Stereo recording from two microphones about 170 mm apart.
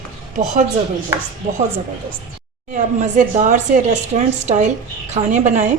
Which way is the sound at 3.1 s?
45° right (ahead or behind).